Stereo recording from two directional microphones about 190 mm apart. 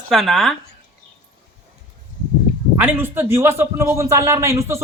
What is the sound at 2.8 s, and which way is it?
Speech, 10° right (ahead or behind).